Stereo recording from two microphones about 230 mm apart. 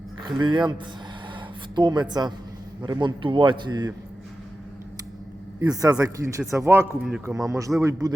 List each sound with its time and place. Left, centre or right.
0.3 s a man's voice: centre
1.7 s a man's voice: centre
5.5 s a man's voice: centre